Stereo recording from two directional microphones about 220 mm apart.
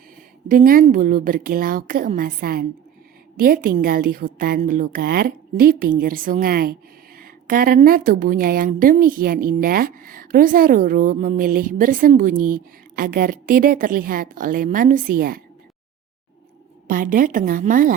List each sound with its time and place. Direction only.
0.4 s a woman's voice: 40° right (ahead or behind)
16.8 s a woman's voice: 35° right (ahead or behind)